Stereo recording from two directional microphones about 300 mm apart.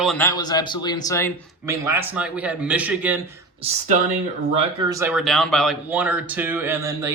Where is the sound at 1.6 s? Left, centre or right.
Centre.